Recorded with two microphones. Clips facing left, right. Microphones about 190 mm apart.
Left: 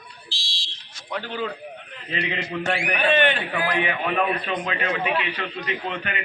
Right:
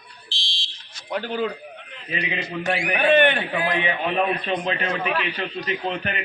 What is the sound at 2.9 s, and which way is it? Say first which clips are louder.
Speech: right 4 dB; 55° right (ahead or behind).